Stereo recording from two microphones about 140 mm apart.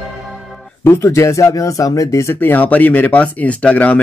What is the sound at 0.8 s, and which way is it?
Speech, 20° left (ahead or behind).